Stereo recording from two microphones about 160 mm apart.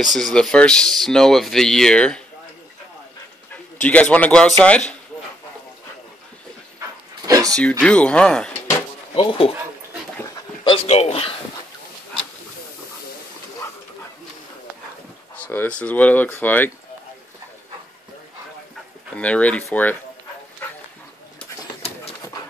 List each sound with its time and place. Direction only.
0.1 s speech: 5° left (ahead or behind)
3.8 s speech: 10° left (ahead or behind)
7.2 s a sound: 20° right (ahead or behind)
7.8 s speech: 5° left (ahead or behind)
9.1 s speech: 35° left (ahead or behind)
10.2 s dog: 25° left (ahead or behind)
10.9 s speech: 40° left (ahead or behind)
15.3 s speech: 10° left (ahead or behind)
19.1 s speech: 10° left (ahead or behind)